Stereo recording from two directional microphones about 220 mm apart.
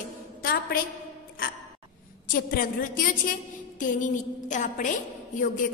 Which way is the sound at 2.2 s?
40° left (ahead or behind).